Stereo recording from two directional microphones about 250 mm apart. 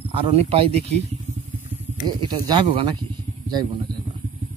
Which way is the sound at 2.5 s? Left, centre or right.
Right.